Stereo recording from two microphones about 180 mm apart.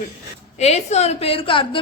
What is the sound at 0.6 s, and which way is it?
A woman's voice, 35° left (ahead or behind).